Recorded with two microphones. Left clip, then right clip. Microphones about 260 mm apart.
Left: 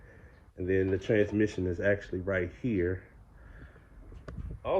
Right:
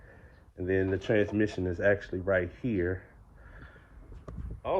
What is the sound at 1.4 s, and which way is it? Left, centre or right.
Speech, centre.